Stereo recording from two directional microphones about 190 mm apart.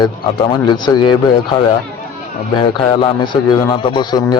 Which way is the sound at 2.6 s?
25° left (ahead or behind).